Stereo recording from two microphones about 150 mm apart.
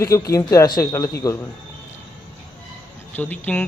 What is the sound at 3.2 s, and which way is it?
Speech, 10° left (ahead or behind).